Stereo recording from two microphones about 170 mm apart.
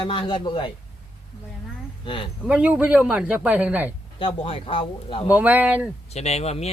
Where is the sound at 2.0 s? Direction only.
30° left (ahead or behind).